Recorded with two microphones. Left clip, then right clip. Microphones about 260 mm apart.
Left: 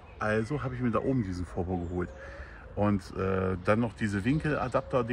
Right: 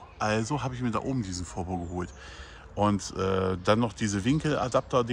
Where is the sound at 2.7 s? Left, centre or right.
Centre.